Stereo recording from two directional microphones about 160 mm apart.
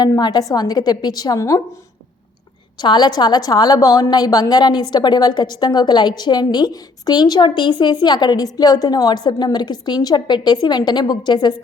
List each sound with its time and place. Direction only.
0.0 s a woman's voice: 25° left (ahead or behind)
2.8 s a woman's voice: 25° left (ahead or behind)